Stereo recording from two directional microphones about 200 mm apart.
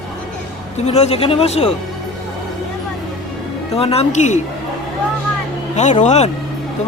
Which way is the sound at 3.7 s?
30° left (ahead or behind).